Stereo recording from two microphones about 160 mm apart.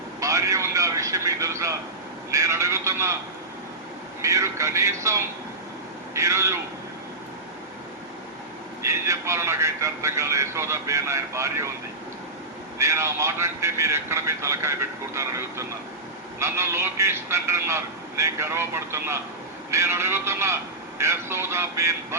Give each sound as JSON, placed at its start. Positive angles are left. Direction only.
{"t": 0.2, "sound": "a man's voice", "side_deg": -20}
{"t": 4.2, "sound": "a man's voice", "side_deg": -20}
{"t": 8.8, "sound": "a man's voice", "side_deg": -15}
{"t": 12.8, "sound": "a man's voice", "side_deg": -15}